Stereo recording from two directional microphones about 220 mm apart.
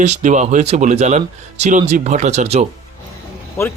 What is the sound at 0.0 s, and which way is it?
Speech, 35° right (ahead or behind).